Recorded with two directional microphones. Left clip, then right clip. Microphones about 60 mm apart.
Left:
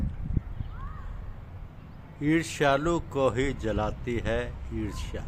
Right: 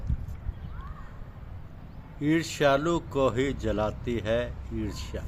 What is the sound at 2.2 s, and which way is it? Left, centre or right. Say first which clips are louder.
Speech: right 1 dB; left.